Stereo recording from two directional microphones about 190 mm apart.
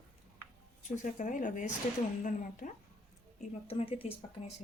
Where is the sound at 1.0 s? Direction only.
45° left (ahead or behind).